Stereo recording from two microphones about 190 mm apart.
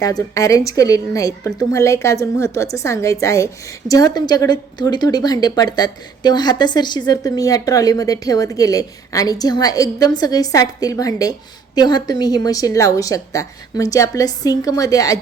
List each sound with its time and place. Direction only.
0.0 s a woman's voice: 20° left (ahead or behind)